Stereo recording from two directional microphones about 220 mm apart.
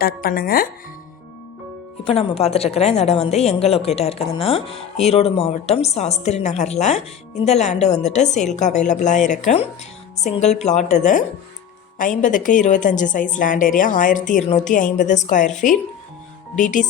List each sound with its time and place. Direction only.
0.0 s a woman's voice: 40° left (ahead or behind)
2.0 s a woman's voice: 25° left (ahead or behind)
16.6 s a woman's voice: 35° left (ahead or behind)